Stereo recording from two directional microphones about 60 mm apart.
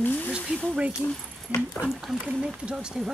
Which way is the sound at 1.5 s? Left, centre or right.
Right.